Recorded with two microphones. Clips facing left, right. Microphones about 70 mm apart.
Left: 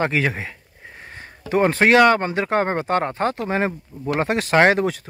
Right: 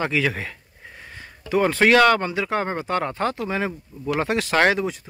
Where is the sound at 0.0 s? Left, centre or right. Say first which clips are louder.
Left 2 dB; left.